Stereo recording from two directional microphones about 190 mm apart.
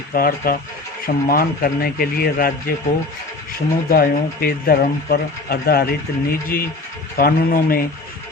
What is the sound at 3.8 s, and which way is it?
Speech, 50° left (ahead or behind).